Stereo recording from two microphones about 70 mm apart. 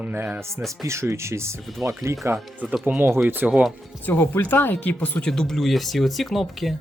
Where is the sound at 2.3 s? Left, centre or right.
Right.